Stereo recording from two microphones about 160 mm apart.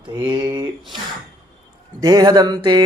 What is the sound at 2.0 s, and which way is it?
Speech, 25° right (ahead or behind).